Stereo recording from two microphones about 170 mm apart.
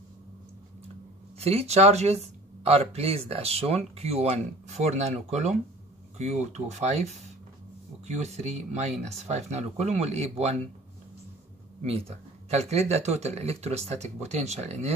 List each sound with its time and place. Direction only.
1.4 s speech: 35° right (ahead or behind)
12.4 s speech: 40° right (ahead or behind)